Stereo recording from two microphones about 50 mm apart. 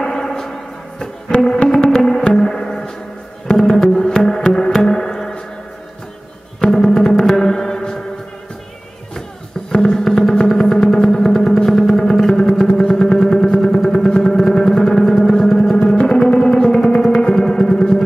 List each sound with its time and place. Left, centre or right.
0.0 s a sound: centre
1.3 s music: left
6.7 s music: centre
9.7 s music: centre
12.5 s vehicle: centre
13.7 s music: centre